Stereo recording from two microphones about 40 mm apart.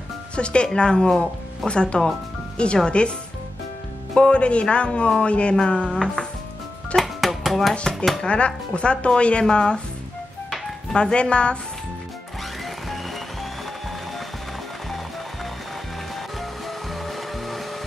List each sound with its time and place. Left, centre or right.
0.4 s speech: left
4.1 s speech: left
5.9 s music: centre
7.0 s music: centre
7.9 s speech: centre
8.3 s speech: left
10.9 s speech: left
12.6 s music: centre
16.3 s music: centre